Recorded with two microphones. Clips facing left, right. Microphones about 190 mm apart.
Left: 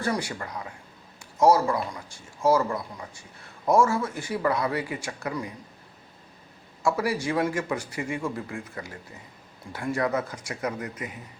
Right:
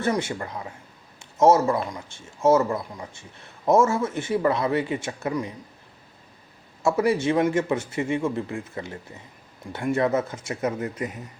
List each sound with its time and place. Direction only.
0.0 s speech: 25° right (ahead or behind)
6.8 s speech: 25° right (ahead or behind)